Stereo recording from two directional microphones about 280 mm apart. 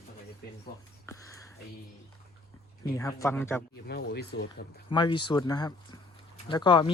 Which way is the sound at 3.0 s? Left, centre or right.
Centre.